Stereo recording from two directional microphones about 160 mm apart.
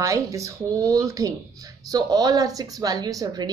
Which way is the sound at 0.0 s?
20° right (ahead or behind).